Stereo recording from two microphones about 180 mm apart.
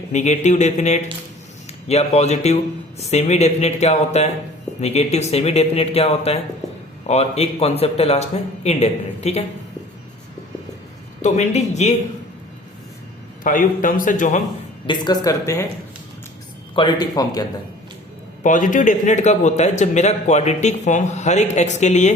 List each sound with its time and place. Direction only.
0.1 s speech: 40° left (ahead or behind)
11.2 s speech: 40° left (ahead or behind)
13.4 s a man's voice: 50° left (ahead or behind)
14.8 s speech: 20° left (ahead or behind)
16.7 s speech: 25° left (ahead or behind)
18.4 s speech: 45° left (ahead or behind)